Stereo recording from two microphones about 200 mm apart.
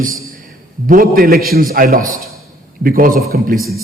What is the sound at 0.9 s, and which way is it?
A man's voice, 45° right (ahead or behind).